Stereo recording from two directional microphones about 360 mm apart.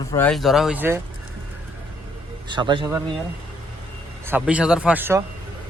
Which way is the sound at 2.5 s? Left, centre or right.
Centre.